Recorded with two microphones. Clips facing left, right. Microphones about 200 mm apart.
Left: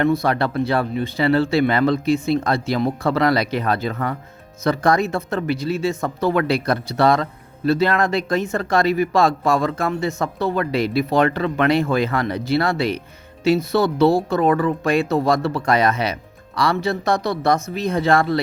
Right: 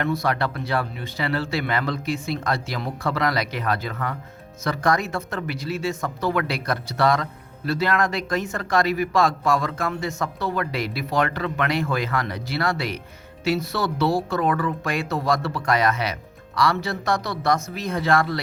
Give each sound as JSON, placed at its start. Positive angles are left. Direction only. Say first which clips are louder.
{"t": 0.2, "sound": "a man's voice", "louder": "left 5 dB", "side_deg": 30}